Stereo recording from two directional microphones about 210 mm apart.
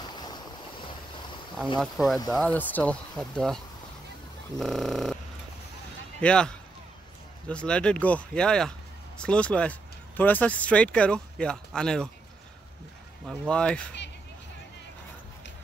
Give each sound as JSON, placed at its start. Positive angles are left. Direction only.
{"t": 0.1, "sound": "waves", "side_deg": 20}
{"t": 1.8, "sound": "speech", "side_deg": 0}
{"t": 6.2, "sound": "speech", "side_deg": 5}
{"t": 13.3, "sound": "speech", "side_deg": 5}